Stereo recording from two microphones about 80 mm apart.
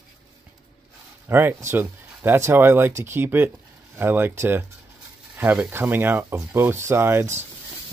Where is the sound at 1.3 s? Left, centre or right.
Right.